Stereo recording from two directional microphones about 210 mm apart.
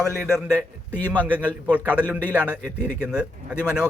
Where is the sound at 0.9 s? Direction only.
10° left (ahead or behind).